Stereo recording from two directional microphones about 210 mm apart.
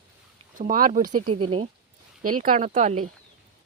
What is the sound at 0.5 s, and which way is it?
A woman's voice, 40° right (ahead or behind).